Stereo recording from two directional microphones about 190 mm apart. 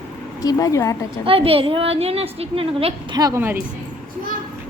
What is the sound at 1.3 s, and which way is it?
A woman's voice, 30° right (ahead or behind).